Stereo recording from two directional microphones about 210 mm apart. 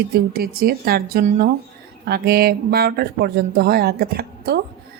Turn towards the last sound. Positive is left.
turn(degrees=-50)  # may be behind; listen again after turning